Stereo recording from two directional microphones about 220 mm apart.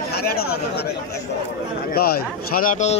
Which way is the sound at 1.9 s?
45° left (ahead or behind).